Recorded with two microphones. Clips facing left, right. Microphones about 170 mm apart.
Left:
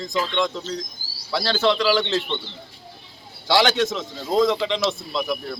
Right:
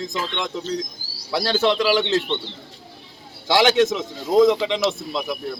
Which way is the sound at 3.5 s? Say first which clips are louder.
Right 3 dB; 15° right (ahead or behind).